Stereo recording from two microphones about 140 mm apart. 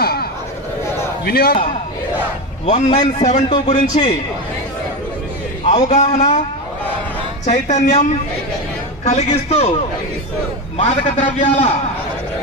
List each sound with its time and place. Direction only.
0.0 s chatter: 90° left
1.2 s a man's voice: 90° left
2.6 s a man's voice: 55° left (ahead or behind)
5.9 s a man's voice: 55° left (ahead or behind)
7.4 s a man's voice: 55° left (ahead or behind)
10.8 s a man's voice: 55° left (ahead or behind)